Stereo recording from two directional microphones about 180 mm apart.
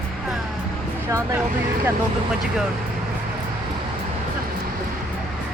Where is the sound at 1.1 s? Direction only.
15° right (ahead or behind).